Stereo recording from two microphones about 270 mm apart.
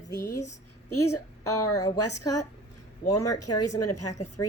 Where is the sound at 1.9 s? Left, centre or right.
Left.